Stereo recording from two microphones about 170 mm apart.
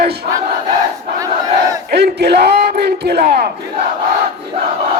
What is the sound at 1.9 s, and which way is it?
Speech, 75° right (ahead or behind).